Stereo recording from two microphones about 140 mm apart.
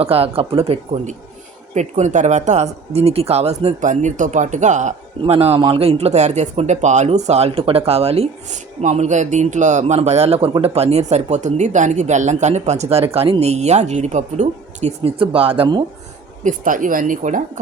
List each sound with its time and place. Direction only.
0.0 s a man's voice: 45° right (ahead or behind)
1.7 s speech: 60° right (ahead or behind)
5.2 s a man's voice: 45° right (ahead or behind)
16.4 s a woman's voice: 70° right (ahead or behind)